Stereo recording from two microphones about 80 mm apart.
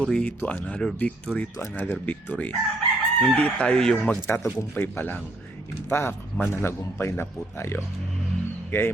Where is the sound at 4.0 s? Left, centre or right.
Left.